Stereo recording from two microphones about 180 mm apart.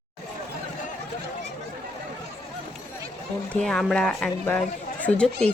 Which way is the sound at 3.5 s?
Centre (ahead or behind).